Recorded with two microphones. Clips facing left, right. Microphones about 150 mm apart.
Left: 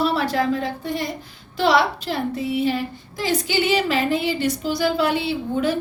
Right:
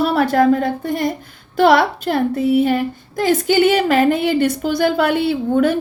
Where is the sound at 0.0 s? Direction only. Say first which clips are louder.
Right 6 dB; 50° right (ahead or behind).